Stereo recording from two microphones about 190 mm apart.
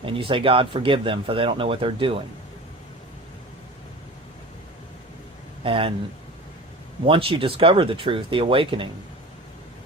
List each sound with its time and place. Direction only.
0.0 s speech: 25° right (ahead or behind)
5.6 s speech: 30° right (ahead or behind)
7.0 s speech: 30° right (ahead or behind)